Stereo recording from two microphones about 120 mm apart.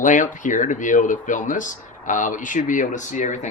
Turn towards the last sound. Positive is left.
turn(degrees=80)